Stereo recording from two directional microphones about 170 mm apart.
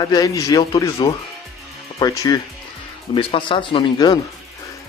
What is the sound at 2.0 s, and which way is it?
Speech, 20° left (ahead or behind).